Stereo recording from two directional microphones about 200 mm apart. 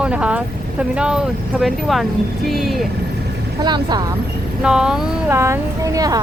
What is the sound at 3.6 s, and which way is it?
Speech, 20° right (ahead or behind).